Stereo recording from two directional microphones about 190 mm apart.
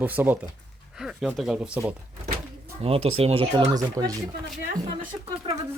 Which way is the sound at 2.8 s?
30° right (ahead or behind).